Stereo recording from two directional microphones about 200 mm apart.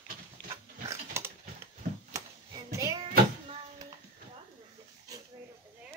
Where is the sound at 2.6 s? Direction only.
15° right (ahead or behind).